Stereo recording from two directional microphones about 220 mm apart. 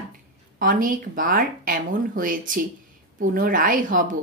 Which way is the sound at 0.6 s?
40° right (ahead or behind).